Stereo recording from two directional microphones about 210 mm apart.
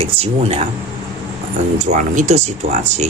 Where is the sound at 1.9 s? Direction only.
35° right (ahead or behind).